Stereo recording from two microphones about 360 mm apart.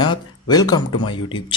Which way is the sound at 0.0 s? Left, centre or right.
Centre.